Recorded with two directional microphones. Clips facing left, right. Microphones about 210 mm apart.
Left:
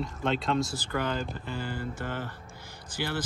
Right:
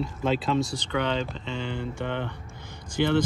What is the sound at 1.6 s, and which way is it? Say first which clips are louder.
Speech: right 4 dB; 5° left (ahead or behind).